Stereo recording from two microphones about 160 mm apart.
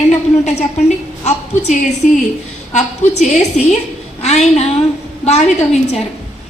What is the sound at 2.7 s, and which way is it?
A woman's voice, 45° left (ahead or behind).